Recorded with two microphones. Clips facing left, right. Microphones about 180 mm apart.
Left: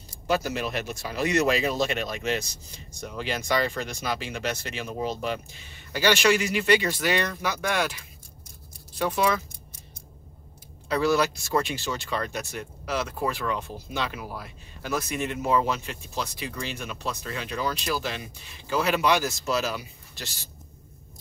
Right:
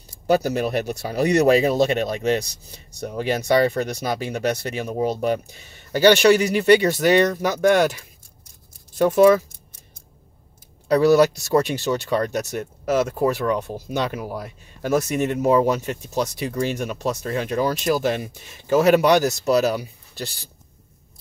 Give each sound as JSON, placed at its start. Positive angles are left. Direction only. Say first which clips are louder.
{"t": 0.3, "sound": "speech", "louder": "right 7 dB", "side_deg": -40}
{"t": 10.9, "sound": "speech", "louder": "right 8 dB", "side_deg": -40}